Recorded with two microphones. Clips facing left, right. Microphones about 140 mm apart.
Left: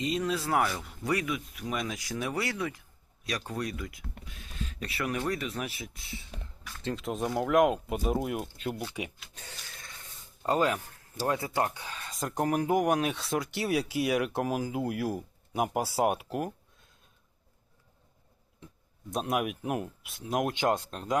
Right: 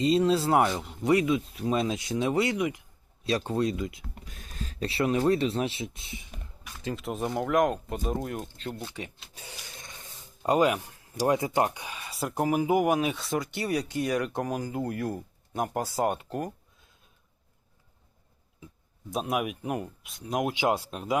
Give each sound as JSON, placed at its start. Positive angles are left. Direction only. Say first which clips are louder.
{"t": 0.0, "sound": "speech", "louder": "right 7 dB", "side_deg": -30}
{"t": 4.3, "sound": "speech", "louder": "even", "side_deg": -45}
{"t": 6.7, "sound": "speech", "louder": "even", "side_deg": -10}
{"t": 9.3, "sound": "speech", "louder": "right 2 dB", "side_deg": -10}
{"t": 19.1, "sound": "speech", "louder": "right 1 dB", "side_deg": 0}